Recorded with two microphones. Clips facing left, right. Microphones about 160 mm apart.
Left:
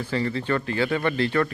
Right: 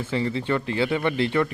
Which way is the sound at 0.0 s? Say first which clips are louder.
Even; 20° right (ahead or behind).